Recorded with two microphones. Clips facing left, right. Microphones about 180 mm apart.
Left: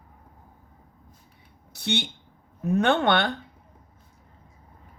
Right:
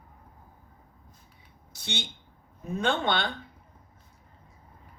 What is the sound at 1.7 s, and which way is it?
Speech, 65° left (ahead or behind).